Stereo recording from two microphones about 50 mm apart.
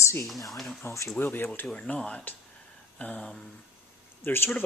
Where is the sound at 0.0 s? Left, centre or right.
Left.